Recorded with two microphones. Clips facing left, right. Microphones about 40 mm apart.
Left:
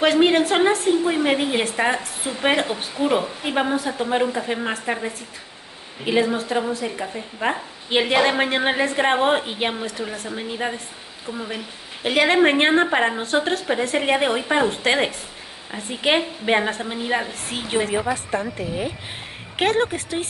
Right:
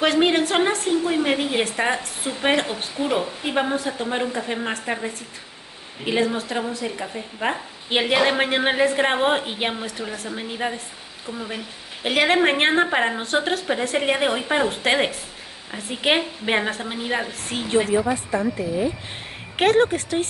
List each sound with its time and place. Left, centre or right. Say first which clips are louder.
0.0 s a woman's voice: left 2 dB; centre
18.3 s a woman's voice: right 2 dB; left
19.5 s a woman's voice: right 3 dB; centre